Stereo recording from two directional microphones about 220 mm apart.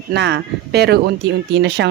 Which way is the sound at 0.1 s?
50° right (ahead or behind).